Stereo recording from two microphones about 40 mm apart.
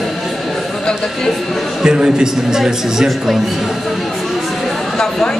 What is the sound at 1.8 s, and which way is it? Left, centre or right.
A man's voice, centre.